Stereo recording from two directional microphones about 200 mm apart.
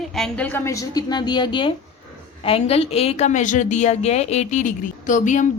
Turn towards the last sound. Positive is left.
turn(degrees=40)  # may be behind; listen again after turning